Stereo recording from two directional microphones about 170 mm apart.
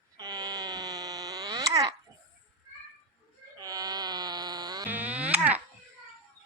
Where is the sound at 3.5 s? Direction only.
20° right (ahead or behind).